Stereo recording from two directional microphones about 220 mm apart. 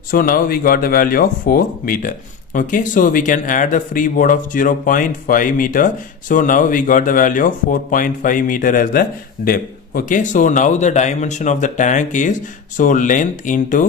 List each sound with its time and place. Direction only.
0.1 s speech: 40° left (ahead or behind)